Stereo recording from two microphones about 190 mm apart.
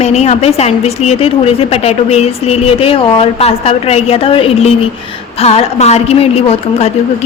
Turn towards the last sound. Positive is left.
turn(degrees=30)  # may be behind; listen again after turning